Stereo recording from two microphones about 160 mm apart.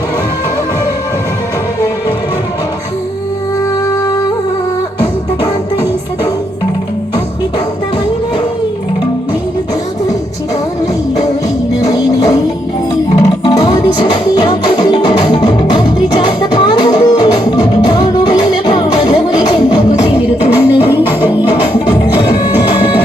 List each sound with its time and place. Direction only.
11.8 s music: 20° left (ahead or behind)
22.2 s music: 30° left (ahead or behind)